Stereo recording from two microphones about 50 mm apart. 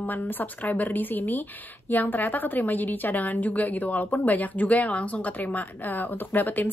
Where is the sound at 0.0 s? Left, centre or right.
Left.